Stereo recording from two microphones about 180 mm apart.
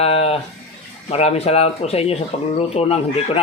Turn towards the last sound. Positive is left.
turn(degrees=35)  # may be behind; listen again after turning